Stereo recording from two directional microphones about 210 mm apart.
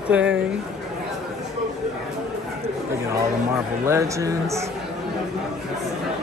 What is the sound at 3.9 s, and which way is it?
Speech, 15° right (ahead or behind).